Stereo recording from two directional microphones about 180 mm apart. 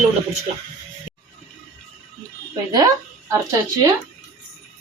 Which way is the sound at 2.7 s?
20° right (ahead or behind).